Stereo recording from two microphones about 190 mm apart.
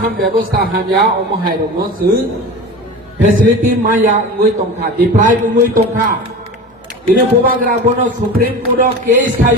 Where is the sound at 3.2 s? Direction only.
45° right (ahead or behind).